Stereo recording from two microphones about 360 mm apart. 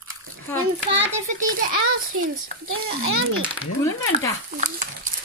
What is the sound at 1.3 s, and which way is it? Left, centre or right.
Speech, right.